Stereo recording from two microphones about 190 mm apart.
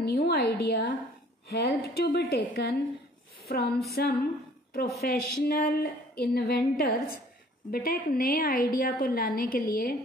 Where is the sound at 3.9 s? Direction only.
55° left (ahead or behind).